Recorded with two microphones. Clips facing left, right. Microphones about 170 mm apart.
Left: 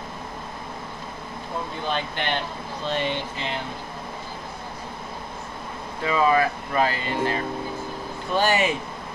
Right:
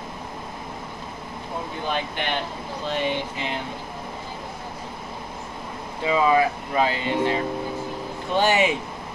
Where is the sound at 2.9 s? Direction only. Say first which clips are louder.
Right 1 dB; 10° right (ahead or behind).